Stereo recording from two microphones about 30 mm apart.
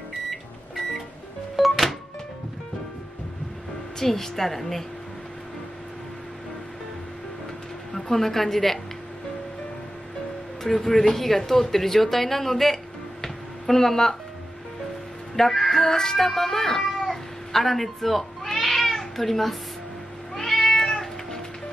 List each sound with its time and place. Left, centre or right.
0.3 s microwave oven: centre
1.6 s music: centre
4.0 s speech: centre
7.9 s a woman's voice: centre
10.6 s speech: centre
15.3 s speech: centre
17.5 s cat: centre